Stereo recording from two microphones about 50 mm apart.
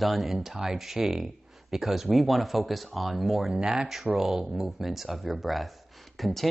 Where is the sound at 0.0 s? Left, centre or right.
Centre.